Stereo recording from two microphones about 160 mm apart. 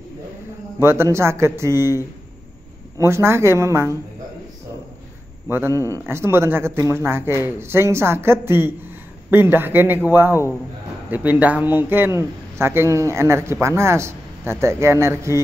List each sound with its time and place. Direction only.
0.7 s a man's voice: 15° right (ahead or behind)
3.0 s a man's voice: 15° right (ahead or behind)
5.5 s a man's voice: 15° right (ahead or behind)